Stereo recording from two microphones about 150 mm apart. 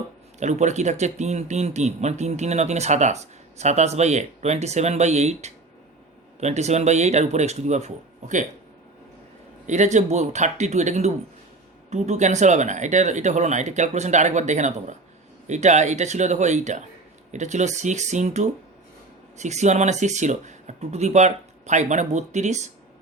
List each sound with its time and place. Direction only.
0.3 s speech: 50° right (ahead or behind)
9.6 s speech: 55° right (ahead or behind)